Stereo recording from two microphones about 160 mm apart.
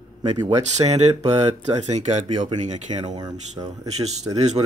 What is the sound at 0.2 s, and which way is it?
Speech, 25° right (ahead or behind).